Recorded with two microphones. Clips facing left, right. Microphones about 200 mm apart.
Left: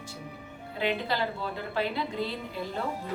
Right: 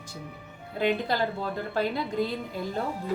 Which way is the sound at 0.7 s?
45° right (ahead or behind).